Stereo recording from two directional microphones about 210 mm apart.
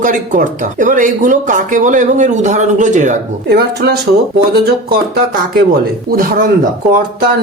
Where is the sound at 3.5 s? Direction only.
50° right (ahead or behind).